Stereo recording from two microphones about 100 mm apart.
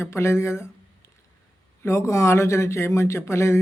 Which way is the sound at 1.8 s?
30° left (ahead or behind).